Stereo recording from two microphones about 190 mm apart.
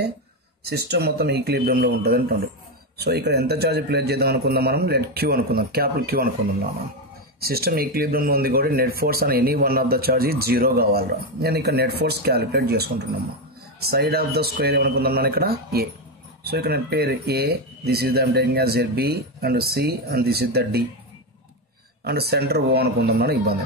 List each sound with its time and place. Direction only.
0.7 s speech: 60° right (ahead or behind)
22.0 s speech: 55° right (ahead or behind)